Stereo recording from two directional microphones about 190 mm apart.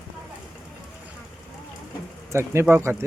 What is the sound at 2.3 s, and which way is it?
Speech, 15° right (ahead or behind).